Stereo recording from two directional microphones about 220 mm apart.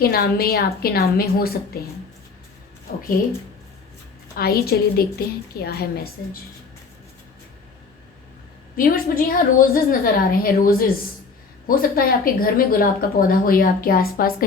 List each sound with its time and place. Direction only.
0.0 s a woman's voice: 45° left (ahead or behind)
2.9 s a woman's voice: 40° left (ahead or behind)
4.4 s a woman's voice: 45° left (ahead or behind)
8.7 s a woman's voice: 40° left (ahead or behind)